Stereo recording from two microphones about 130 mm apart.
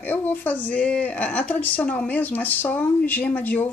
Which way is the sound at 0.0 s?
15° left (ahead or behind).